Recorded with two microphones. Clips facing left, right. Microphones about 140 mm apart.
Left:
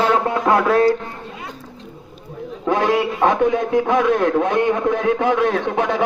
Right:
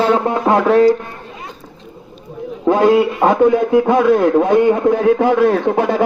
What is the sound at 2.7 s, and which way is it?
A man's voice, 35° right (ahead or behind).